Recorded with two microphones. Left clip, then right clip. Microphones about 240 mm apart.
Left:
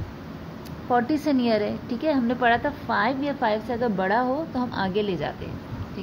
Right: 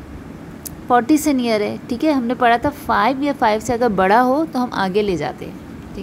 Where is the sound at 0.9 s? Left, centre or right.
Right.